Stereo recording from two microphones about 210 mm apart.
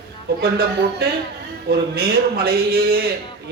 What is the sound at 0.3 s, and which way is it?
Speech, 50° right (ahead or behind).